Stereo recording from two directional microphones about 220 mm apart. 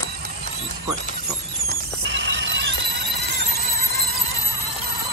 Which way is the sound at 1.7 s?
55° right (ahead or behind).